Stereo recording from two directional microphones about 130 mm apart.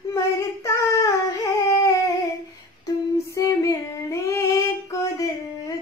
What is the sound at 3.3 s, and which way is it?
Female singing, 25° left (ahead or behind).